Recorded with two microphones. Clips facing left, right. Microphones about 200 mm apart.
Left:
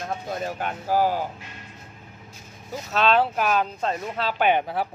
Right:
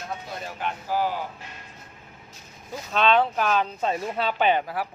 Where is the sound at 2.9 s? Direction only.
5° left (ahead or behind).